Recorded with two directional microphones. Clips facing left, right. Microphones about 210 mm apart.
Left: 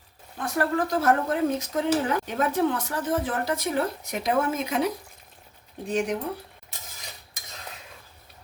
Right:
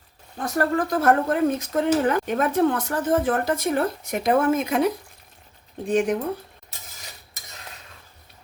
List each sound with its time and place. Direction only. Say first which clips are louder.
0.3 s speech: right 3 dB; 40° right (ahead or behind)
5.9 s speech: right 5 dB; 50° right (ahead or behind)